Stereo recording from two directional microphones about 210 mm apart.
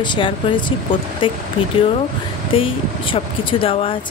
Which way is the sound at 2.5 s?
25° left (ahead or behind).